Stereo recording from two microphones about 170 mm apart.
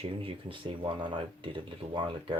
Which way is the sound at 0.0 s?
30° right (ahead or behind).